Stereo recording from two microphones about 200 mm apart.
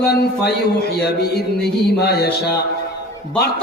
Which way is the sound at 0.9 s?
55° left (ahead or behind).